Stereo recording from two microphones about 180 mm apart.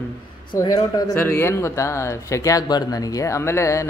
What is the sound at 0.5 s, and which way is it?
Speech, 20° left (ahead or behind).